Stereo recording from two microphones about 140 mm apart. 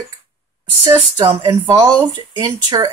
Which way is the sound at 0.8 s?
35° right (ahead or behind).